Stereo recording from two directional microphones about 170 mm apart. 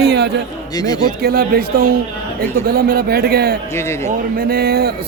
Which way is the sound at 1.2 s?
65° right (ahead or behind).